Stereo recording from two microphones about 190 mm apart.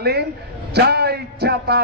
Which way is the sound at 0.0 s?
60° right (ahead or behind).